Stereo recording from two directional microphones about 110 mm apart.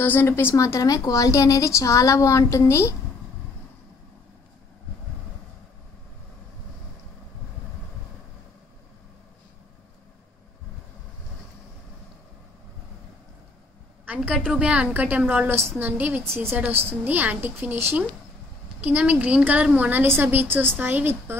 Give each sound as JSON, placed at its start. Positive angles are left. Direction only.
{"t": 0.0, "sound": "a woman's voice", "side_deg": 20}
{"t": 14.0, "sound": "a woman's voice", "side_deg": -10}
{"t": 18.8, "sound": "a woman's voice", "side_deg": -15}